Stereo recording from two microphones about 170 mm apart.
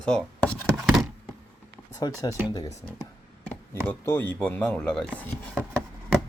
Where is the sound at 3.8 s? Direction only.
15° left (ahead or behind).